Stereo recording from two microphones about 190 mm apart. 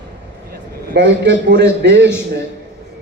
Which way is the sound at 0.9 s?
70° right (ahead or behind).